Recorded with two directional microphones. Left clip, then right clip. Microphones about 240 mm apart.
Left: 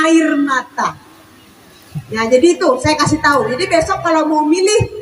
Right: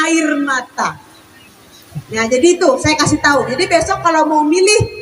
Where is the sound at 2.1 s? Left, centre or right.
Right.